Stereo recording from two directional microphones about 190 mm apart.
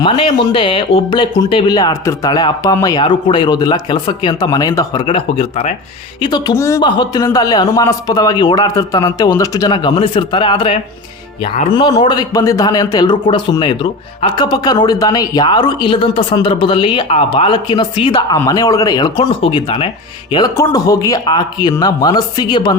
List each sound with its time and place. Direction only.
0.0 s speech: 25° left (ahead or behind)
5.0 s speech: 30° left (ahead or behind)